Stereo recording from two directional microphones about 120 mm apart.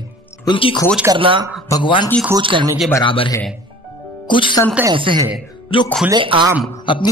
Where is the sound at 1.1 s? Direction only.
45° right (ahead or behind).